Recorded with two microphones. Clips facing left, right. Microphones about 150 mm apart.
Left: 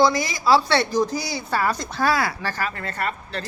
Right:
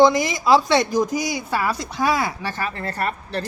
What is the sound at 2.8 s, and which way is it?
Speech, 35° right (ahead or behind).